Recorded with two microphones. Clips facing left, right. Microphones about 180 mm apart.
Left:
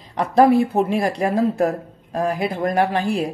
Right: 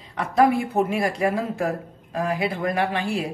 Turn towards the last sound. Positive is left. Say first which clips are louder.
# left 4 dB
turn(degrees=40)  # may be behind; listen again after turning